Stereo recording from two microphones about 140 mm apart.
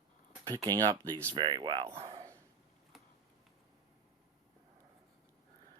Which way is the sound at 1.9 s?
25° right (ahead or behind).